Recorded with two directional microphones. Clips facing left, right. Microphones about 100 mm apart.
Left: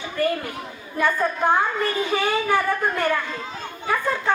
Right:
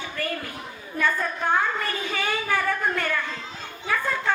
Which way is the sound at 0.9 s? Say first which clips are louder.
Left 4 dB; 20° left (ahead or behind).